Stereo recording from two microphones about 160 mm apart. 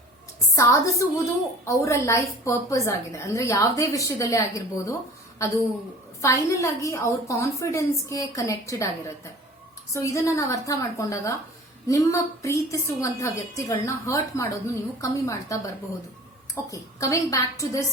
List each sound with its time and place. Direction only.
0.5 s a woman's voice: 20° left (ahead or behind)
9.9 s a woman's voice: 20° left (ahead or behind)